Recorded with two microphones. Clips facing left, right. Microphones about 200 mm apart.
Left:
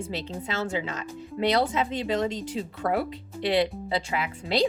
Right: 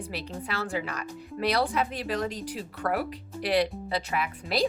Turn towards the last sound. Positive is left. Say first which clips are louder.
# left 2 dB
turn(degrees=25)  # may be behind; listen again after turning